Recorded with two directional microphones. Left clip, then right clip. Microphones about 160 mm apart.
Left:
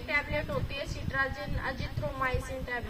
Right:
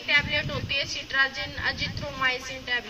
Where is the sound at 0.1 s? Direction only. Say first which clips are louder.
Right 7 dB; 15° left (ahead or behind).